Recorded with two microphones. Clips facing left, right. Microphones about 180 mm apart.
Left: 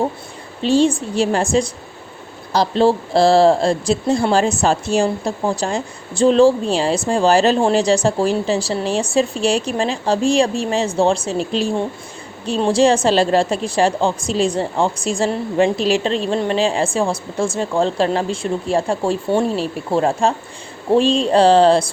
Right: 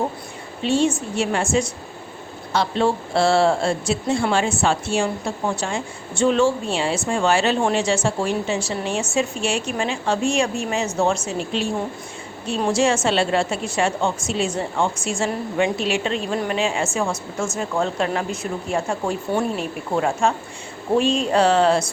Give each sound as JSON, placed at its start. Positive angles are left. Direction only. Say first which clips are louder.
{"t": 0.6, "sound": "speech", "louder": "left 5 dB", "side_deg": 35}